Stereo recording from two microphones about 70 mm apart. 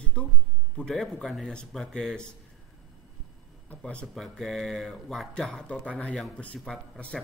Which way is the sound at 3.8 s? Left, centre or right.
Centre.